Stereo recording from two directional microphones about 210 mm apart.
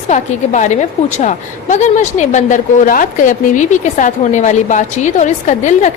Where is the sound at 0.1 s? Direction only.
35° left (ahead or behind).